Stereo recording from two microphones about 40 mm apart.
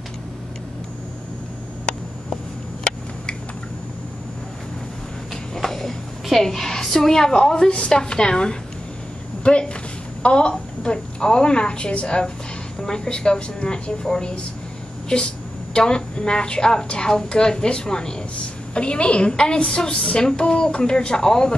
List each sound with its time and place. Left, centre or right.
5.3 s a woman's voice: centre; by 12.2 s left
12.8 s a woman's voice: centre
15.1 s a woman's voice: centre
18.8 s a woman's voice: left